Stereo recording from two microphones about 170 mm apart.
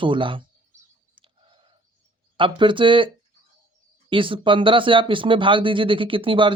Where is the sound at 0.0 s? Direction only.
30° right (ahead or behind).